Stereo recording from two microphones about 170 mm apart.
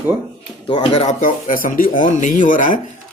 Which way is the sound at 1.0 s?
50° left (ahead or behind).